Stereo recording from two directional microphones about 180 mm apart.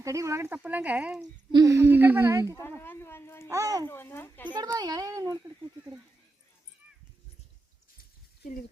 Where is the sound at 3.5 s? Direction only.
15° right (ahead or behind).